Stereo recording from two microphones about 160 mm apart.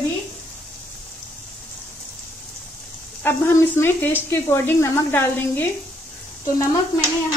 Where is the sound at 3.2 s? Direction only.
15° left (ahead or behind).